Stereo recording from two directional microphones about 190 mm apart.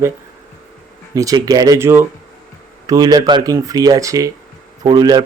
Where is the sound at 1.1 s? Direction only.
20° right (ahead or behind).